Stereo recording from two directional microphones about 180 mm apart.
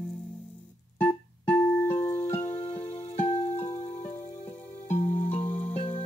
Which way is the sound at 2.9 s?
35° left (ahead or behind).